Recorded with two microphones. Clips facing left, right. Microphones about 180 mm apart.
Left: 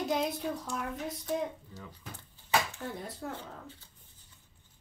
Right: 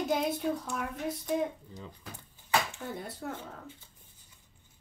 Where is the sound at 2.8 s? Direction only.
Centre (ahead or behind).